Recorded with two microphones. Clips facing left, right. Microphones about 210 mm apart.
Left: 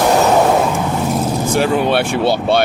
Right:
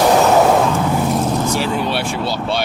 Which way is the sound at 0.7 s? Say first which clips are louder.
Right 1 dB; 5° left (ahead or behind).